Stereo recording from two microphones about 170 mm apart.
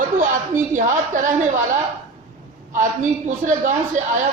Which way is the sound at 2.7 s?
45° right (ahead or behind).